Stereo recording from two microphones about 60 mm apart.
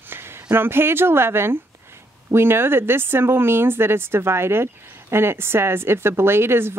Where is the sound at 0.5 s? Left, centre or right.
Right.